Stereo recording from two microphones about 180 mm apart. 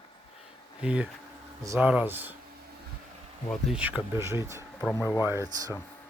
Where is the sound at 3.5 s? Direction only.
5° right (ahead or behind).